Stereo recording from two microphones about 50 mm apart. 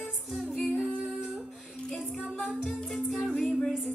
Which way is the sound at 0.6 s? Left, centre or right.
Centre.